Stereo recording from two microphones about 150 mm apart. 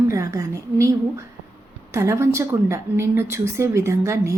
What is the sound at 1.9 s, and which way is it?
A woman's voice, 20° right (ahead or behind).